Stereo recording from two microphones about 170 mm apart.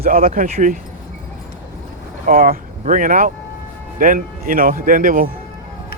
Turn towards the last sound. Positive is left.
turn(degrees=-55)  # may be behind; listen again after turning